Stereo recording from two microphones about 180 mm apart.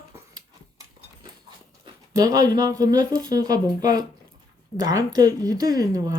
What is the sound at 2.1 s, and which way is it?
Speech, 20° right (ahead or behind).